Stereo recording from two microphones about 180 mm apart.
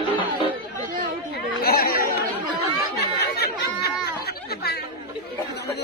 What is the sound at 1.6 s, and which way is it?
Chatter, 55° left (ahead or behind).